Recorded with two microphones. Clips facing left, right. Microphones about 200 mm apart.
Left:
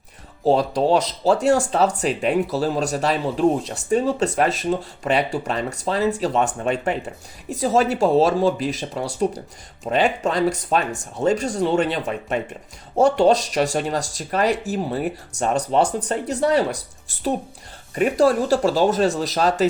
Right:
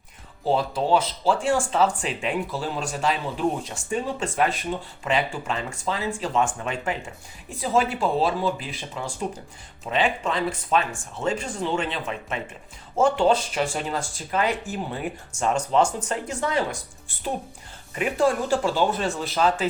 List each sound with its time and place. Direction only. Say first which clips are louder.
0.4 s speech: left 6 dB; 40° left (ahead or behind)
17.9 s speech: left 5 dB; 40° left (ahead or behind)